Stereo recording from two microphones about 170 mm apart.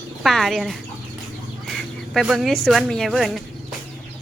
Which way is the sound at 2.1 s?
Centre (ahead or behind).